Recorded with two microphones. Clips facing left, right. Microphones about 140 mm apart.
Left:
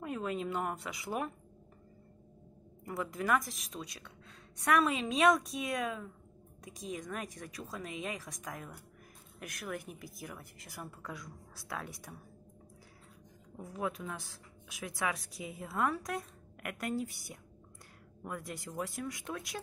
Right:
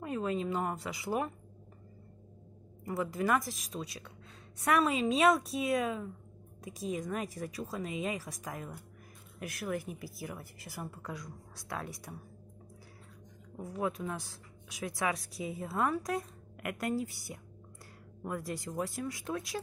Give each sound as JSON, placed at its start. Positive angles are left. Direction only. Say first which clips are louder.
{"t": 0.0, "sound": "speech", "louder": "right 3 dB", "side_deg": 0}
{"t": 2.8, "sound": "speech", "louder": "right 4 dB", "side_deg": 0}
{"t": 13.6, "sound": "speech", "louder": "right 3 dB", "side_deg": 0}